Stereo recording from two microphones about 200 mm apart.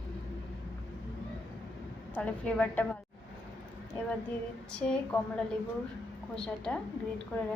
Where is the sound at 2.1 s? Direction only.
5° left (ahead or behind).